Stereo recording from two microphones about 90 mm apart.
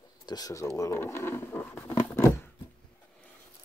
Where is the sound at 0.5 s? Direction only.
35° left (ahead or behind).